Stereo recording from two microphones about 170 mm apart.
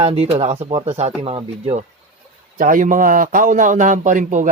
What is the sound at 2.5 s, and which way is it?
Speech, 55° right (ahead or behind).